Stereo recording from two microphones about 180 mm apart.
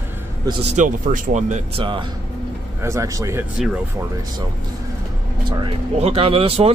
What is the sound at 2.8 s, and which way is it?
Speech, 15° right (ahead or behind).